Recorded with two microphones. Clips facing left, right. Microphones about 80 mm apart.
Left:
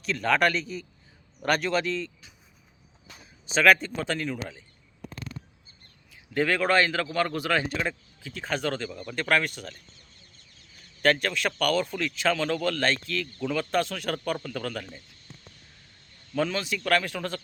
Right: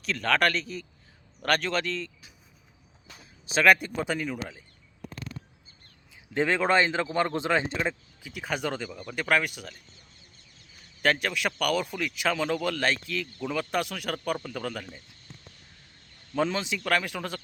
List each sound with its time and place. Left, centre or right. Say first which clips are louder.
0.0 s a man's voice: left 1 dB; centre
3.5 s speech: left 1 dB; centre
6.3 s a man's voice: even; right
11.0 s speech: left 2 dB; centre
16.3 s speech: even; right